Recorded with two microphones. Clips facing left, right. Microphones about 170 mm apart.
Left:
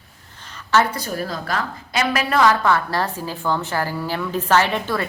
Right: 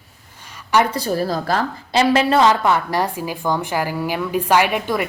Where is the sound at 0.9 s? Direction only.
35° right (ahead or behind).